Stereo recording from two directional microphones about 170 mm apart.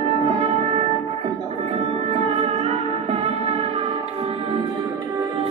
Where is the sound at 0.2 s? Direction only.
35° right (ahead or behind).